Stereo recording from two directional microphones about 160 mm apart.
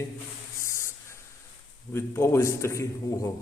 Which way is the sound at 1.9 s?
15° left (ahead or behind).